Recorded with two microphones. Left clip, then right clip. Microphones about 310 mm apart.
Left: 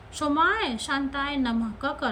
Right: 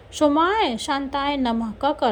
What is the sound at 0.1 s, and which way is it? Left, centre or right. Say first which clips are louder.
A woman's voice: right 5 dB; centre.